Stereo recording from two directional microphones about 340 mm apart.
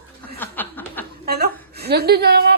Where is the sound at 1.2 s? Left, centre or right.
Right.